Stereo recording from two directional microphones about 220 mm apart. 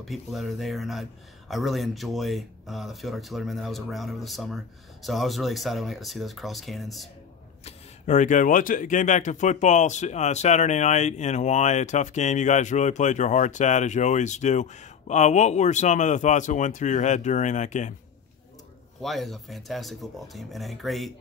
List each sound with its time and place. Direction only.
0.0 s speech: centre (ahead or behind)
7.6 s speech: 35° left (ahead or behind)
18.9 s speech: centre (ahead or behind)